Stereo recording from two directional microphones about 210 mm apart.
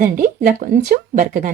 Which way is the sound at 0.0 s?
40° right (ahead or behind).